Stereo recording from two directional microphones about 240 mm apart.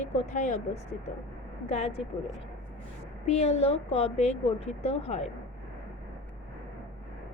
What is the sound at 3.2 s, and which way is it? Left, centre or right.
A woman's voice, left.